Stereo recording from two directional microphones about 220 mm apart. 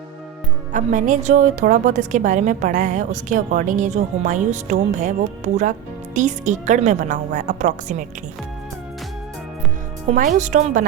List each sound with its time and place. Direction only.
0.7 s a woman's voice: 35° right (ahead or behind)
6.1 s a woman's voice: 35° right (ahead or behind)
10.1 s a woman's voice: 35° right (ahead or behind)